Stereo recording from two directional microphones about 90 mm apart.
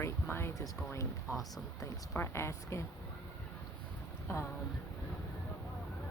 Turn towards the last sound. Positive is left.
turn(degrees=30)  # may be behind; listen again after turning